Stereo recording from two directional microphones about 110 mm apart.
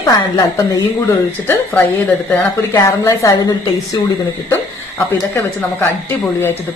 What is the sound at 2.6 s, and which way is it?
Speech, 30° left (ahead or behind).